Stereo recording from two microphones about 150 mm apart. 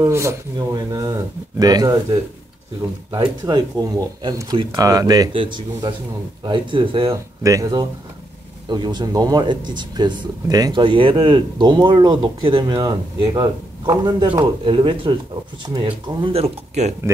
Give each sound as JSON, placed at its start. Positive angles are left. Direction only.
{"t": 0.0, "sound": "speech", "side_deg": -20}
{"t": 3.1, "sound": "speech", "side_deg": -25}
{"t": 5.3, "sound": "speech", "side_deg": -35}
{"t": 7.1, "sound": "speech", "side_deg": -20}